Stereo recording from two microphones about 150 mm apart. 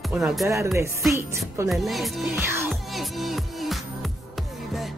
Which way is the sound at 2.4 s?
15° right (ahead or behind).